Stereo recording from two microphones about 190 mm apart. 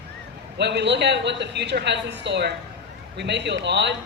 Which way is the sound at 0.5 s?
65° right (ahead or behind).